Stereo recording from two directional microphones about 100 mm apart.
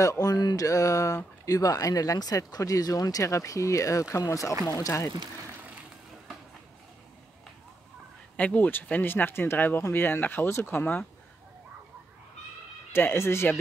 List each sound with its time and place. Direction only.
0.0 s speech: 35° left (ahead or behind)
8.4 s speech: 15° left (ahead or behind)
12.9 s speech: 25° left (ahead or behind)